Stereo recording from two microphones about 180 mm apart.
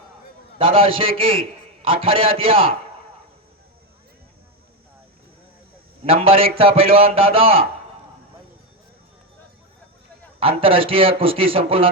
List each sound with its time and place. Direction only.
0.6 s a man's voice: 30° right (ahead or behind)
6.1 s a man's voice: 30° right (ahead or behind)
10.4 s a man's voice: 30° right (ahead or behind)